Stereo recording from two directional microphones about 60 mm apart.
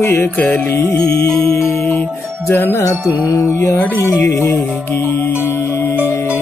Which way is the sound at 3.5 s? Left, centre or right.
Left.